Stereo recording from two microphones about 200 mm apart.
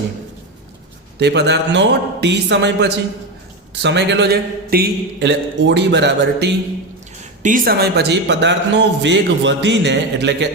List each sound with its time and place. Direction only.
1.2 s speech: 60° right (ahead or behind)
7.4 s speech: 45° right (ahead or behind); by 10.5 s 60° right (ahead or behind)